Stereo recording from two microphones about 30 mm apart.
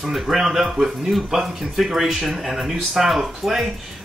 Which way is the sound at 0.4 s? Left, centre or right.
Centre.